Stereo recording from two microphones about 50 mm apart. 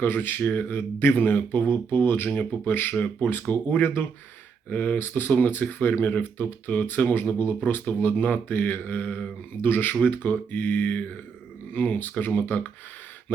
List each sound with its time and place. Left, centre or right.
0.0 s speech: left
4.9 s speech: left